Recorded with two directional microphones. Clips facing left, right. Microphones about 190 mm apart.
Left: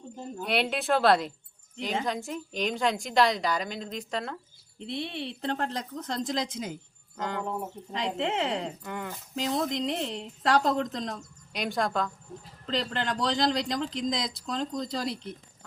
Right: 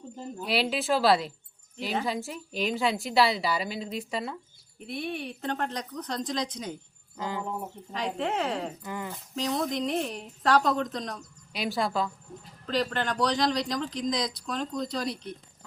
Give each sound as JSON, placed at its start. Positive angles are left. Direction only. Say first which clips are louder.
{"t": 0.4, "sound": "a woman's voice", "louder": "even", "side_deg": 0}
{"t": 4.8, "sound": "speech", "louder": "even", "side_deg": 25}
{"t": 7.2, "sound": "a woman's voice", "louder": "left 1 dB", "side_deg": -5}
{"t": 7.9, "sound": "speech", "louder": "even", "side_deg": 20}
{"t": 8.8, "sound": "a woman's voice", "louder": "even", "side_deg": 0}
{"t": 9.4, "sound": "speech", "louder": "even", "side_deg": 25}
{"t": 11.5, "sound": "a woman's voice", "louder": "even", "side_deg": -5}
{"t": 12.6, "sound": "speech", "louder": "right 2 dB", "side_deg": 20}